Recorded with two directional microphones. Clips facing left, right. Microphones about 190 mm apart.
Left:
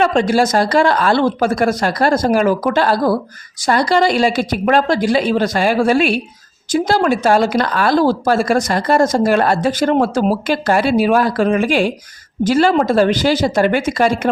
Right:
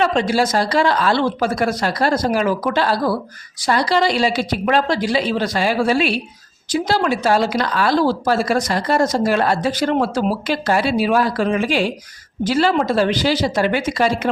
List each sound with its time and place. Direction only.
0.0 s speech: 50° left (ahead or behind)